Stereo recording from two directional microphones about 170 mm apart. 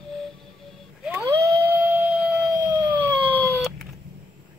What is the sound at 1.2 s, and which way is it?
Howl, 20° right (ahead or behind).